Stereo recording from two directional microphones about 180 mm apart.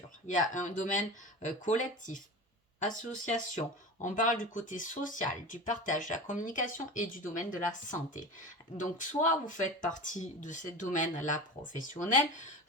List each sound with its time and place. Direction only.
0.5 s speech: 45° left (ahead or behind)